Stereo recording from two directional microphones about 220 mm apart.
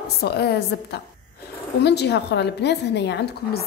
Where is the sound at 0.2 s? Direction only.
45° left (ahead or behind).